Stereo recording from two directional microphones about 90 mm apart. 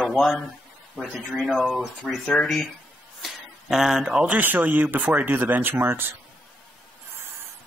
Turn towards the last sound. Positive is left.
turn(degrees=-25)  # may be behind; listen again after turning